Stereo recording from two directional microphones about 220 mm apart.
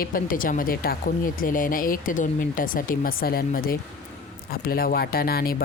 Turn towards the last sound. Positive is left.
turn(degrees=45)  # may be behind; listen again after turning